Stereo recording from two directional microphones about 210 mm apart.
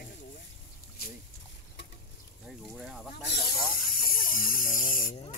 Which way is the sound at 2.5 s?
Centre (ahead or behind).